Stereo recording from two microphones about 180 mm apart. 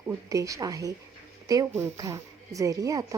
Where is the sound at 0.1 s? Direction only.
20° right (ahead or behind).